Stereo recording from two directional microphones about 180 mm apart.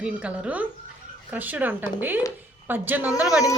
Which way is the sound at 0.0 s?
5° right (ahead or behind).